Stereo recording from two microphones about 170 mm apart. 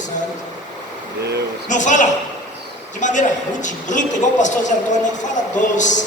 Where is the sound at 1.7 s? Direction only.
45° left (ahead or behind).